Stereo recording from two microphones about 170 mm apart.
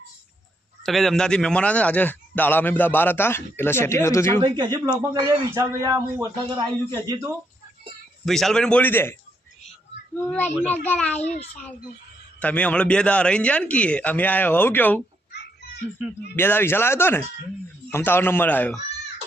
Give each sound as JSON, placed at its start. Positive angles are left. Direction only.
{"t": 0.9, "sound": "a man's voice", "side_deg": 0}
{"t": 4.4, "sound": "a man's voice", "side_deg": -25}
{"t": 8.2, "sound": "a man's voice", "side_deg": 0}
{"t": 10.2, "sound": "a man's voice", "side_deg": 10}
{"t": 12.4, "sound": "a man's voice", "side_deg": 10}
{"t": 16.3, "sound": "a man's voice", "side_deg": 10}